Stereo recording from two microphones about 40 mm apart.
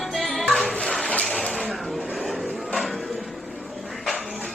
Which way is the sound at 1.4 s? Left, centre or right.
Centre.